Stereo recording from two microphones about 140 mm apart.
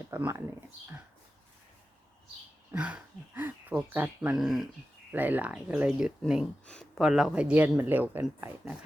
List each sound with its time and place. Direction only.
0.1 s speech: 20° right (ahead or behind)
2.7 s speech: 10° right (ahead or behind)
5.1 s speech: 10° right (ahead or behind)